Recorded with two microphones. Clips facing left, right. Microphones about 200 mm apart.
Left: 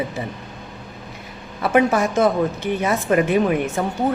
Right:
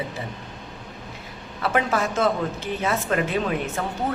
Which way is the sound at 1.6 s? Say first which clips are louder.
Left 6 dB; 15° left (ahead or behind).